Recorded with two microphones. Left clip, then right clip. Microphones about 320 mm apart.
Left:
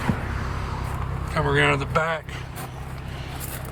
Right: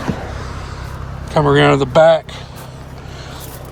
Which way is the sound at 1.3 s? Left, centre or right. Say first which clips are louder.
Right 9 dB; centre.